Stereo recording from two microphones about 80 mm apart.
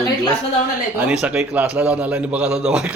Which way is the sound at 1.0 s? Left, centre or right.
Centre.